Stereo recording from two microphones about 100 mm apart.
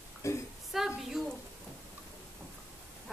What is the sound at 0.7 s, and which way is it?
Speech, 5° right (ahead or behind).